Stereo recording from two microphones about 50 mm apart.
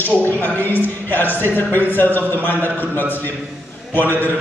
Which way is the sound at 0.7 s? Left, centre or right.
Left.